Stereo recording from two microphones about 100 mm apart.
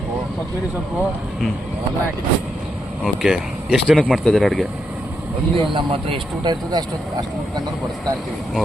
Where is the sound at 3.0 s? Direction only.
5° right (ahead or behind).